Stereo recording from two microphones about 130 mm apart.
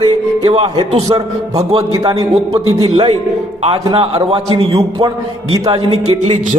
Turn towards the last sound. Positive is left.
turn(degrees=-45)  # may be behind; listen again after turning